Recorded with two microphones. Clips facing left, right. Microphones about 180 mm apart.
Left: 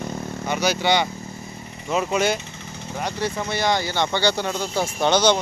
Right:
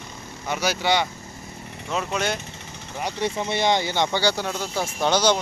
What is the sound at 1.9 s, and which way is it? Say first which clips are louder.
Speech: left 5 dB; 10° left (ahead or behind).